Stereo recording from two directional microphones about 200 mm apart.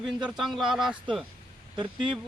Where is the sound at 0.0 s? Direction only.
5° right (ahead or behind).